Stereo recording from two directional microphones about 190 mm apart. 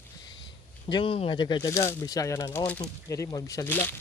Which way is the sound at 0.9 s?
25° left (ahead or behind).